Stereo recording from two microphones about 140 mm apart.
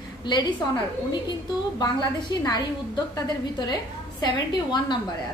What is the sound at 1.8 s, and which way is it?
A woman's voice, 30° left (ahead or behind).